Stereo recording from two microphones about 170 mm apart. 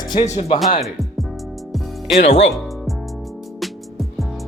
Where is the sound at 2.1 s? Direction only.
40° left (ahead or behind).